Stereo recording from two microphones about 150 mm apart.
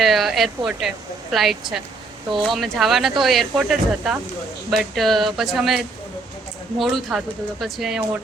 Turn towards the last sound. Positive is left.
turn(degrees=0)  # may be behind; listen again after turning